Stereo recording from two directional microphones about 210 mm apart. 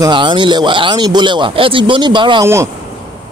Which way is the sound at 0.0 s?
20° right (ahead or behind).